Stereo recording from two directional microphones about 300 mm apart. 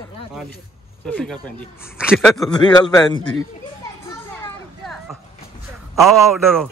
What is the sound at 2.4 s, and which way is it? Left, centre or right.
Speech, centre.